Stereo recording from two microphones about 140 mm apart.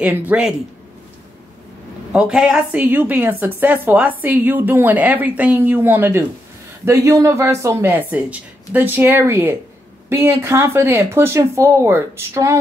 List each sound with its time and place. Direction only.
0.0 s speech: 10° right (ahead or behind)
2.1 s speech: 5° right (ahead or behind); by 12.5 s 20° right (ahead or behind)